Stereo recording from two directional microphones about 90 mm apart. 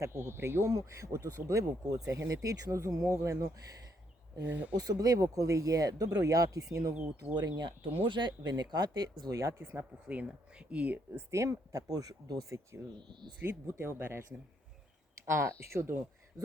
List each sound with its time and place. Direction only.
0.0 s speech: 25° right (ahead or behind)
0.6 s speech: 40° right (ahead or behind)
4.4 s speech: 15° right (ahead or behind)
4.8 s speech: 45° right (ahead or behind)
7.3 s speech: 50° right (ahead or behind)
9.3 s speech: 35° right (ahead or behind)
10.7 s speech: 15° right (ahead or behind)
11.3 s speech: 35° right (ahead or behind)
13.4 s speech: 30° right (ahead or behind)